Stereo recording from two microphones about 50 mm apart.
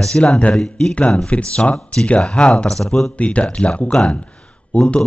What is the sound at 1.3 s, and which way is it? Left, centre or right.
Speech, left.